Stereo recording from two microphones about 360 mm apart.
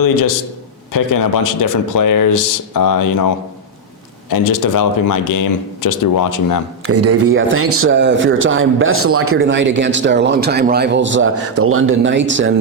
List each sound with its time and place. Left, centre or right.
0.0 s speech: left
6.8 s a man's voice: right